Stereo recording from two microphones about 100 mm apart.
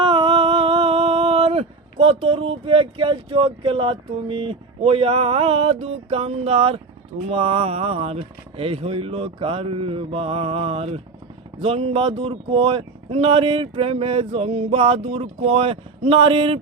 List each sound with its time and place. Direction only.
0.0 s humming: 55° right (ahead or behind); by 6.7 s 85° right
7.3 s speech: 75° right (ahead or behind)